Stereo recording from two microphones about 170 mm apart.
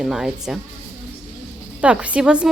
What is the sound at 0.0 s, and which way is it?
Speech, 5° right (ahead or behind).